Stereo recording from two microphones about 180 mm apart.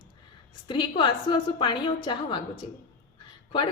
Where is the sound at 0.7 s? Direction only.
25° left (ahead or behind).